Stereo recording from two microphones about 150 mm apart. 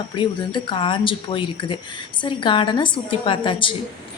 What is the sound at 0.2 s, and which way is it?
Speech, 35° left (ahead or behind).